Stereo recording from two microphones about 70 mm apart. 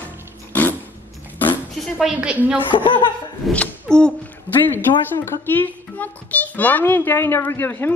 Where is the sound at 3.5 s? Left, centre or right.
Centre.